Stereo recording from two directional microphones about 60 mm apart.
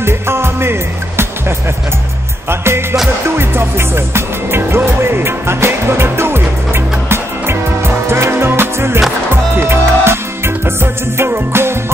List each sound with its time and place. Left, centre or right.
0.0 s music: right
2.6 s music: right